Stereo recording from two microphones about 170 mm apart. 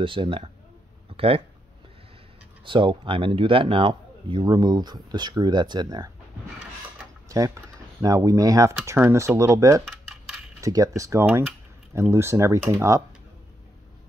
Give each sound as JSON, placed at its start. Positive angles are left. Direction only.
{"t": 0.0, "sound": "speech", "side_deg": -30}
{"t": 2.6, "sound": "speech", "side_deg": -30}
{"t": 7.2, "sound": "speech", "side_deg": -20}
{"t": 10.0, "sound": "coin", "side_deg": -5}
{"t": 10.6, "sound": "speech", "side_deg": -20}